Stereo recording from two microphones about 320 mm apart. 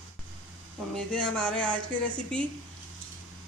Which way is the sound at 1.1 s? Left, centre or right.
Centre.